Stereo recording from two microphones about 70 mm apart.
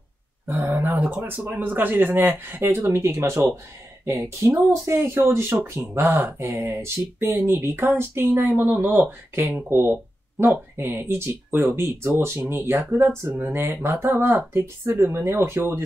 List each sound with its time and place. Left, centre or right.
0.6 s speech: right
9.5 s speech: right